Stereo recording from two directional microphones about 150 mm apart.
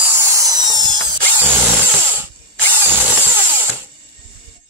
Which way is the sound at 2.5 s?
15° right (ahead or behind).